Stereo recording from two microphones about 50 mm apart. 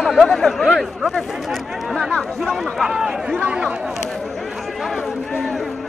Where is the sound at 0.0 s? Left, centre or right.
Centre.